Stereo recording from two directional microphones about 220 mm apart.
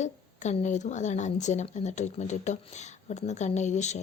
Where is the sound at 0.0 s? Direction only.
30° left (ahead or behind).